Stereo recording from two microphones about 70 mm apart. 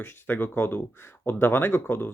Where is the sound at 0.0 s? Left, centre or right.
Left.